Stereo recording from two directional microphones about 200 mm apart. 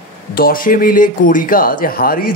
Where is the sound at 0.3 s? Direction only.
45° left (ahead or behind).